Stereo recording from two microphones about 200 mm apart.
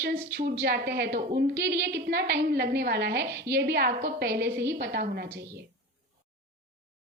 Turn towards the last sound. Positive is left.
turn(degrees=-50)  # may be behind; listen again after turning